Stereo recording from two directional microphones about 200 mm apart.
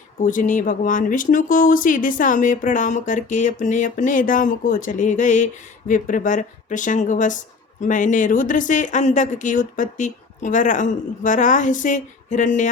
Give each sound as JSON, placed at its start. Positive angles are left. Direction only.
{"t": 0.2, "sound": "speech", "side_deg": 40}